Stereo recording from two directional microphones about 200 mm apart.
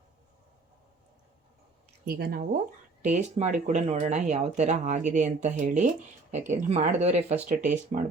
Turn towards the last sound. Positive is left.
turn(degrees=-35)  # may be behind; listen again after turning